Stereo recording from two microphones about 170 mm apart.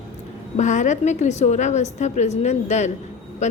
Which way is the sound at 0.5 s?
45° left (ahead or behind).